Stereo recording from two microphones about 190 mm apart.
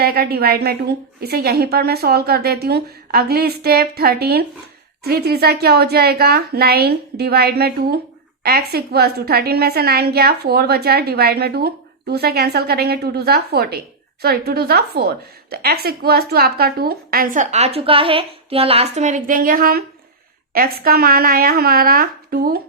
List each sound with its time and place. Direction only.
0.0 s a woman's voice: 55° right (ahead or behind)